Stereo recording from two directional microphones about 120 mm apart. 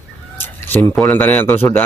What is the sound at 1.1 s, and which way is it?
Speech, 15° left (ahead or behind).